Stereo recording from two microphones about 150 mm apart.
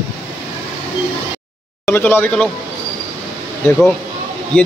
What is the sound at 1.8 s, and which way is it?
Speech, 15° left (ahead or behind).